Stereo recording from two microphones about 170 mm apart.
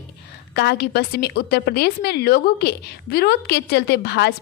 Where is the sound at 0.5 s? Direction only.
75° left (ahead or behind).